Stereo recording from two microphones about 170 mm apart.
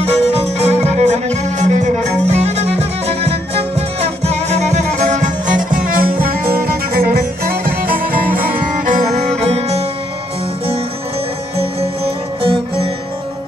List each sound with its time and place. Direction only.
0.0 s music: 40° right (ahead or behind); by 8.1 s 60° right (ahead or behind)
8.8 s music: 45° right (ahead or behind)
12.4 s music: 30° right (ahead or behind)